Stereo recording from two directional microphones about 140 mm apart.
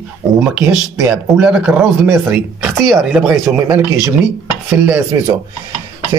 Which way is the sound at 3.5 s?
15° right (ahead or behind).